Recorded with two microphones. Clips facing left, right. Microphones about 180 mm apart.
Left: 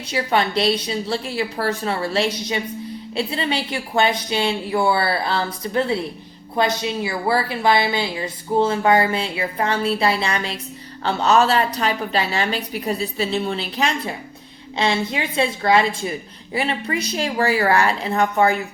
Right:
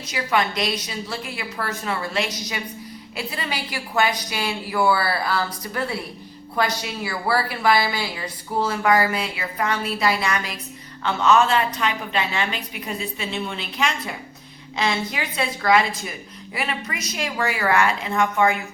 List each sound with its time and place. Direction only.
0.1 s a woman's voice: 30° left (ahead or behind)